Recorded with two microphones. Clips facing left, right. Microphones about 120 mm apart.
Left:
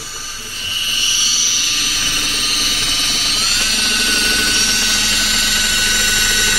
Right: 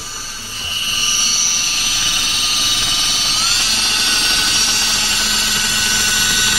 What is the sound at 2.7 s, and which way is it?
Dental drill, 30° right (ahead or behind).